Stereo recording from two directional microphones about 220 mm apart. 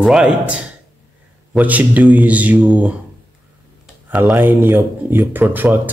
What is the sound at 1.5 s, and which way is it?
Speech, 5° right (ahead or behind).